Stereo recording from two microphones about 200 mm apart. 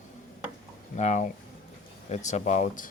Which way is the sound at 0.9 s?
35° left (ahead or behind).